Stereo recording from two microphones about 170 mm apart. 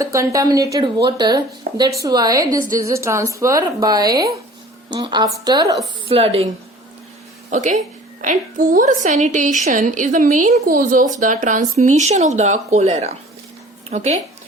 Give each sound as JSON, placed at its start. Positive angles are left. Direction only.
{"t": 0.0, "sound": "speech", "side_deg": -20}
{"t": 1.7, "sound": "a sound", "side_deg": -90}
{"t": 2.0, "sound": "speech", "side_deg": -20}
{"t": 6.1, "sound": "a woman's voice", "side_deg": -35}
{"t": 7.5, "sound": "a woman's voice", "side_deg": -45}